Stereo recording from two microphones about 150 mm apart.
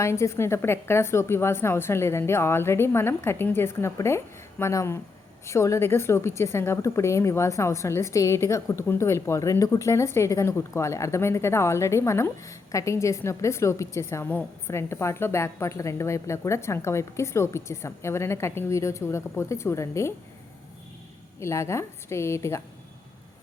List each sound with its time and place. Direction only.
0.0 s a woman's voice: 20° left (ahead or behind)
21.4 s a woman's voice: 20° left (ahead or behind)